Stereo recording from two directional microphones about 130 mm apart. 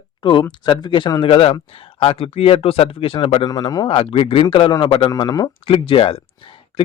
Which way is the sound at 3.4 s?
30° left (ahead or behind).